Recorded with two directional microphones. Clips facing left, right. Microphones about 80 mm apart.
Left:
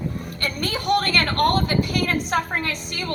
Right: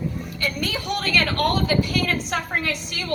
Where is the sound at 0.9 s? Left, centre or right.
Left.